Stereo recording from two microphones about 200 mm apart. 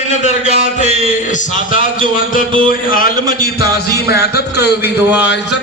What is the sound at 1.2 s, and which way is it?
Speech, 40° left (ahead or behind).